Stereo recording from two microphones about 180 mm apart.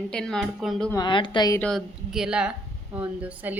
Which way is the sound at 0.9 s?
25° left (ahead or behind).